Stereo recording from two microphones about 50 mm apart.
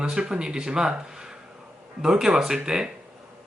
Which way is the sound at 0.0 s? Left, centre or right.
Centre.